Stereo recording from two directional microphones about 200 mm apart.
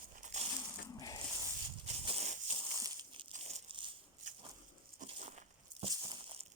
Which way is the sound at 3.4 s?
30° right (ahead or behind).